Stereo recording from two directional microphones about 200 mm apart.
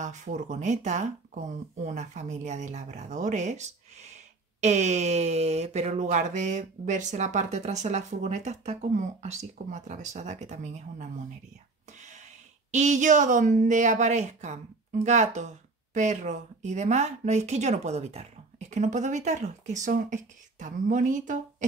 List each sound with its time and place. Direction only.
0.0 s speech: 40° right (ahead or behind)
12.7 s speech: 35° right (ahead or behind)